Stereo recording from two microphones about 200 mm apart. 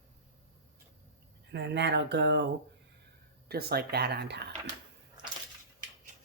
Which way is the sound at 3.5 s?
50° right (ahead or behind).